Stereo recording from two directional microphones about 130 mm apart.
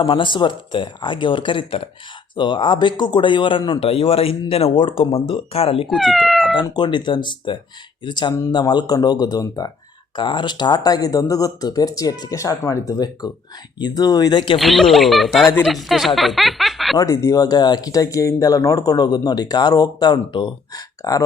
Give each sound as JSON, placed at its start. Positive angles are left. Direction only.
{"t": 0.0, "sound": "speech", "side_deg": 40}
{"t": 5.9, "sound": "speech", "side_deg": 0}
{"t": 6.6, "sound": "speech", "side_deg": 35}
{"t": 10.2, "sound": "speech", "side_deg": 40}
{"t": 14.6, "sound": "speech", "side_deg": 0}
{"t": 17.0, "sound": "speech", "side_deg": 25}